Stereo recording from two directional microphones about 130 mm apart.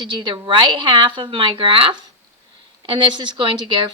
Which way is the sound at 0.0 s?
40° right (ahead or behind).